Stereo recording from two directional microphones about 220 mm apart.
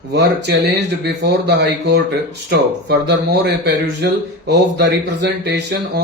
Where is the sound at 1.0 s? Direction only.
50° right (ahead or behind).